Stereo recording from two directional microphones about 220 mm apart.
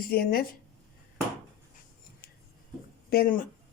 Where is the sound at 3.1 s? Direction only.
40° left (ahead or behind).